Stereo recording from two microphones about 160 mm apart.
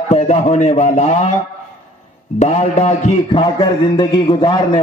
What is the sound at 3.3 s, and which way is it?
A man's voice, 30° left (ahead or behind).